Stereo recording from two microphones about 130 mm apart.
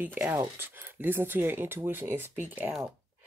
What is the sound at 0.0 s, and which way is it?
Speech, 15° right (ahead or behind).